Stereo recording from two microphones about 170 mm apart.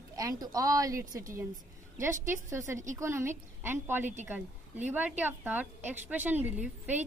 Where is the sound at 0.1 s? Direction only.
20° right (ahead or behind).